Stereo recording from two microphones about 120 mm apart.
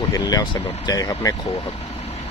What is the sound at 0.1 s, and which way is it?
Speech, 30° left (ahead or behind).